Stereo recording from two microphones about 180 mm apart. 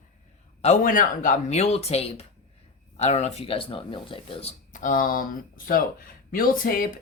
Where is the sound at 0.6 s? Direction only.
45° left (ahead or behind).